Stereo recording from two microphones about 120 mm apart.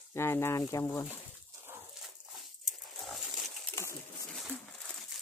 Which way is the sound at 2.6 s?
Centre (ahead or behind).